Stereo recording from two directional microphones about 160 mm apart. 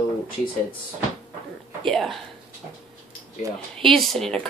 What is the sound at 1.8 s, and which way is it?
Speech, 5° left (ahead or behind).